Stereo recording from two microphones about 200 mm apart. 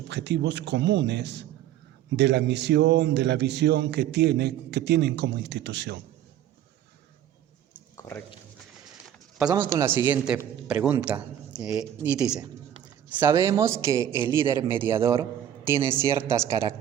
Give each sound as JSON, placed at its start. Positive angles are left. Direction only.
{"t": 0.1, "sound": "a man's voice", "side_deg": -60}
{"t": 7.9, "sound": "a sound", "side_deg": 15}
{"t": 9.5, "sound": "a man's voice", "side_deg": -20}